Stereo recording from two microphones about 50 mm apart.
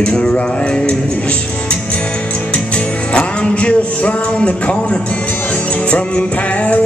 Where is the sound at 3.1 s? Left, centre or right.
Left.